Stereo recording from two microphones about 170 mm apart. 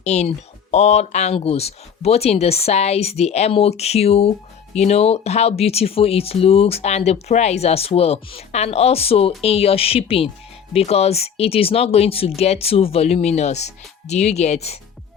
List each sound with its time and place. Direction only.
0.0 s speech: 40° left (ahead or behind)